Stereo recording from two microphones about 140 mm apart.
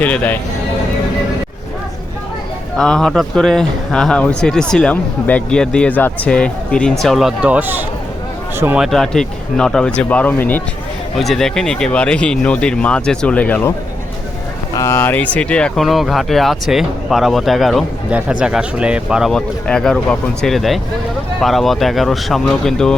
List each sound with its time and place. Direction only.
0.0 s a man's voice: 10° left (ahead or behind)
2.7 s a man's voice: 5° left (ahead or behind); by 8.8 s 15° right (ahead or behind)
8.8 s a man's voice: 5° left (ahead or behind)
11.2 s a man's voice: centre (ahead or behind)
14.8 s speech: 20° left (ahead or behind); by 19.3 s 5° right (ahead or behind)
19.3 s speech: 5° left (ahead or behind)